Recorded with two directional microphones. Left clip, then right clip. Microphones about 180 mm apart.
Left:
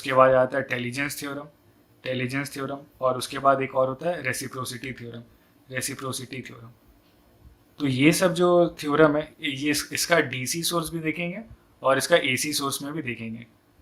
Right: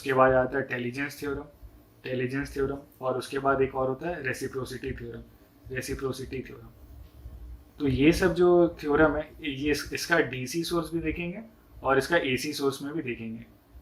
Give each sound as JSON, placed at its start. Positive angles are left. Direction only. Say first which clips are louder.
{"t": 0.0, "sound": "speech", "louder": "left 4 dB", "side_deg": 45}
{"t": 7.8, "sound": "speech", "louder": "left 2 dB", "side_deg": 45}